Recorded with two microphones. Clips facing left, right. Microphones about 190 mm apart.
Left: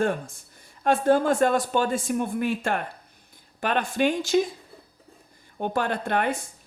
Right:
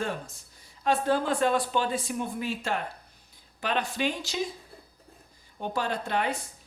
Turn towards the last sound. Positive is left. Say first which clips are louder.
# left 4 dB
turn(degrees=50)  # may be behind; listen again after turning